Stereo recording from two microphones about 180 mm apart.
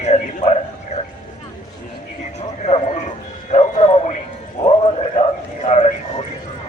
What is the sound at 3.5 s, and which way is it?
Bow-wow, 40° left (ahead or behind).